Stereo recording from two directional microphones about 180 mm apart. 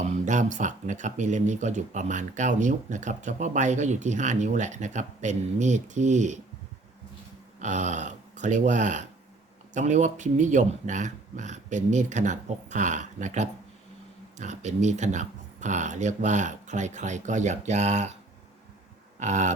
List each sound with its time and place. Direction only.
0.0 s speech: 40° right (ahead or behind)
7.6 s speech: 45° right (ahead or behind)
19.2 s speech: 40° right (ahead or behind)